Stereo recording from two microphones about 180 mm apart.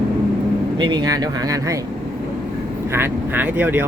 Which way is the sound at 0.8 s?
25° right (ahead or behind).